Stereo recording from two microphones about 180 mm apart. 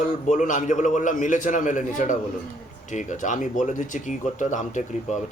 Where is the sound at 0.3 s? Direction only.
45° left (ahead or behind).